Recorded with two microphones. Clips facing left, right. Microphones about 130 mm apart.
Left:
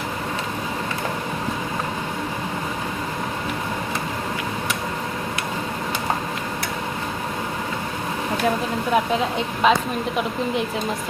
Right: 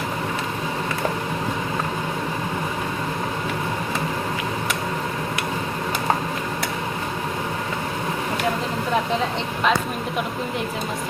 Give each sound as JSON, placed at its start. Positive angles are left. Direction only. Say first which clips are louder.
{"t": 9.6, "sound": "speech", "louder": "left 3 dB", "side_deg": 5}